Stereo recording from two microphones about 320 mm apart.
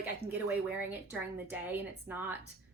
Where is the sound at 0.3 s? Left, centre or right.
Centre.